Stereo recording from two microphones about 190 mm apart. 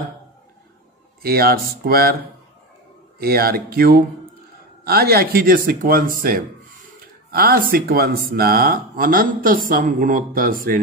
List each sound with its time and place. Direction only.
1.2 s speech: 55° right (ahead or behind)
3.2 s speech: 55° right (ahead or behind)